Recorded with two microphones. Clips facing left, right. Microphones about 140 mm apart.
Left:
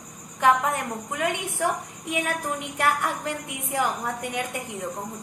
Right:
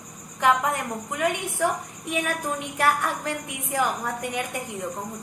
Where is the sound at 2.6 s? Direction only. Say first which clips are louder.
Right 1 dB; 15° left (ahead or behind).